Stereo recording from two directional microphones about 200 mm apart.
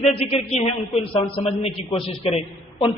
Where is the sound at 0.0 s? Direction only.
30° left (ahead or behind).